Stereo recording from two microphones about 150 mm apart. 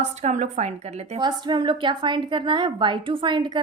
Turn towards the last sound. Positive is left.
turn(degrees=-30)  # may be behind; listen again after turning